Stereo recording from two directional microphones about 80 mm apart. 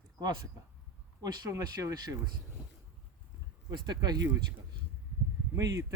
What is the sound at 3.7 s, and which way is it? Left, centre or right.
Speech, right.